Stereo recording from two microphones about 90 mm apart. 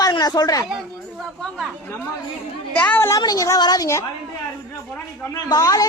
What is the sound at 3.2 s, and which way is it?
Speech, 45° left (ahead or behind).